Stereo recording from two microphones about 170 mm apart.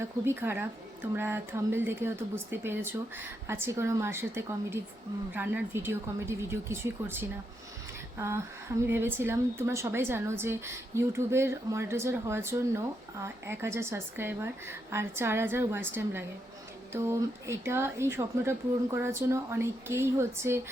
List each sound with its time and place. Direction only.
0.0 s a woman's voice: 15° right (ahead or behind)